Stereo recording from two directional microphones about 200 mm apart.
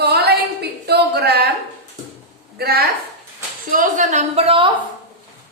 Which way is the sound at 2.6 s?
50° right (ahead or behind).